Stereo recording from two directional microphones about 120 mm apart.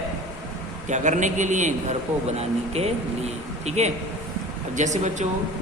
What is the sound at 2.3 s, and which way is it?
Speech, 60° right (ahead or behind).